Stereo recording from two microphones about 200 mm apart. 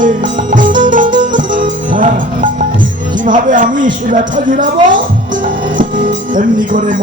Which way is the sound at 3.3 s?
40° right (ahead or behind).